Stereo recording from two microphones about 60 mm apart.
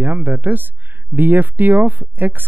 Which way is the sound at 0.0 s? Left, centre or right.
Right.